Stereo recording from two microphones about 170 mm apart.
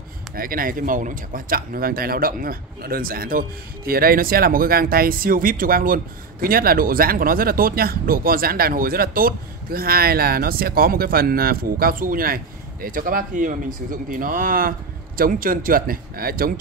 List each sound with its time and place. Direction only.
0.4 s speech: 55° right (ahead or behind)